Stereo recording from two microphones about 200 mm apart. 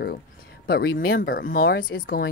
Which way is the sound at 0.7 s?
50° left (ahead or behind).